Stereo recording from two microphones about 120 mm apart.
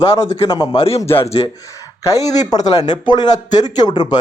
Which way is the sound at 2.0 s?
30° left (ahead or behind).